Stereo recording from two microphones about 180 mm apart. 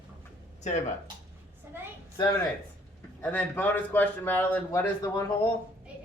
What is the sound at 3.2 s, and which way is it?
A man's voice, 10° left (ahead or behind).